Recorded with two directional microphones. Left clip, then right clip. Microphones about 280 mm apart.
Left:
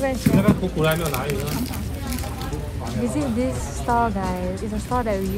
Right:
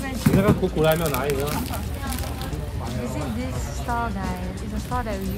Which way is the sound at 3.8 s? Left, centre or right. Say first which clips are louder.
Left 6 dB; centre.